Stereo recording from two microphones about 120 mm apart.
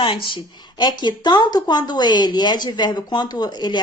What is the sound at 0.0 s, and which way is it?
A woman's voice, 45° left (ahead or behind).